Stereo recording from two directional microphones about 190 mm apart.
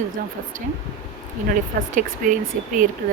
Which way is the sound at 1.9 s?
45° right (ahead or behind).